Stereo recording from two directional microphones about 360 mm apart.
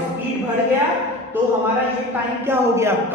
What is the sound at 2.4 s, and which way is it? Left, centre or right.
Speech, centre.